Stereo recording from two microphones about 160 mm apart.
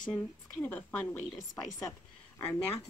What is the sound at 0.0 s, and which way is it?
Speech, 5° left (ahead or behind).